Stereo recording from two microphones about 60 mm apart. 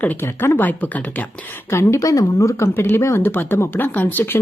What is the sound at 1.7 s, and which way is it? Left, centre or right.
Speech, left.